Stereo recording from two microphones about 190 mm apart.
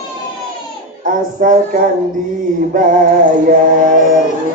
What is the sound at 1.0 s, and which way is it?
Speech, 45° right (ahead or behind).